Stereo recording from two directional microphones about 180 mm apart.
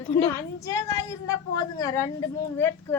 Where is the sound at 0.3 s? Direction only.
20° left (ahead or behind).